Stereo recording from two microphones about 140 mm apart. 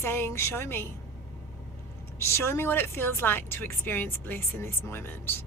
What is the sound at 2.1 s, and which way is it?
Speech, 20° left (ahead or behind).